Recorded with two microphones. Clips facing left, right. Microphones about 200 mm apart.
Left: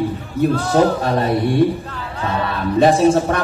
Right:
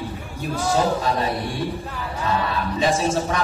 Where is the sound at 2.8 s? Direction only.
60° left (ahead or behind).